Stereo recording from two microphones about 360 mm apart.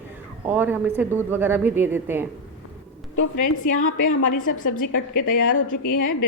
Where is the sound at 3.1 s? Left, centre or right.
Left.